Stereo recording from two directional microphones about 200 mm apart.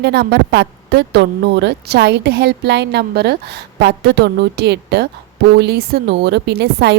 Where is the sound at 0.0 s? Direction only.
55° right (ahead or behind).